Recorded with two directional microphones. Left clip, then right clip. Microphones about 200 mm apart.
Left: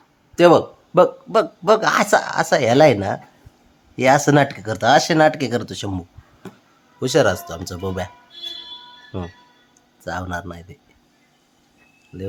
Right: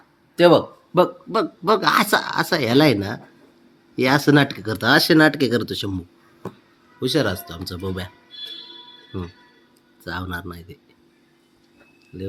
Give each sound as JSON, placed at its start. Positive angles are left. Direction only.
{"t": 0.3, "sound": "speech", "side_deg": 20}
{"t": 7.0, "sound": "speech", "side_deg": 30}
{"t": 10.0, "sound": "speech", "side_deg": 20}